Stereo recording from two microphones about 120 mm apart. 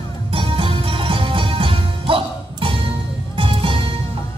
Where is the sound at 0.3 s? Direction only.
50° right (ahead or behind).